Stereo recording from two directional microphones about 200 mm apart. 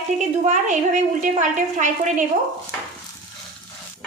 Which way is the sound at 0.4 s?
35° right (ahead or behind).